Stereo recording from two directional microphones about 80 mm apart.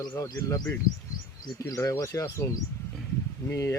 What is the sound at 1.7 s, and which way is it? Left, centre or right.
Speech, left.